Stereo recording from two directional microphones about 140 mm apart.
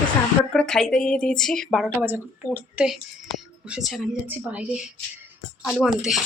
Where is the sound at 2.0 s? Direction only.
10° right (ahead or behind).